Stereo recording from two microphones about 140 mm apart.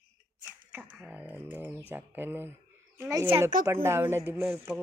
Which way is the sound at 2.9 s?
20° right (ahead or behind).